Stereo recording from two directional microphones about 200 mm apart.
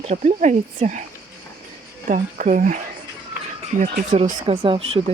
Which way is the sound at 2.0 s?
40° right (ahead or behind).